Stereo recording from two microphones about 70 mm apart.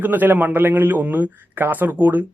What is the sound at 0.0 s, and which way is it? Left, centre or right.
Speech, right.